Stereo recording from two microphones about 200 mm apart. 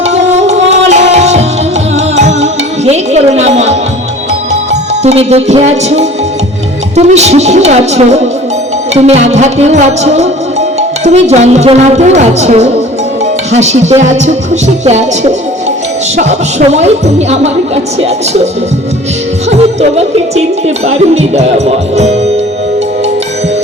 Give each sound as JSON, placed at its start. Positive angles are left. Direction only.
{"t": 0.0, "sound": "music", "side_deg": -35}
{"t": 6.9, "sound": "speech", "side_deg": -35}
{"t": 19.5, "sound": "speech", "side_deg": -35}